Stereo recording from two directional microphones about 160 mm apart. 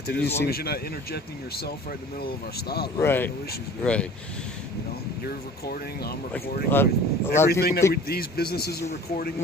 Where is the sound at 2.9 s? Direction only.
15° left (ahead or behind).